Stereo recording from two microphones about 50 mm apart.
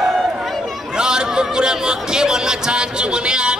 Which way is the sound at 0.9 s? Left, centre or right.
Centre.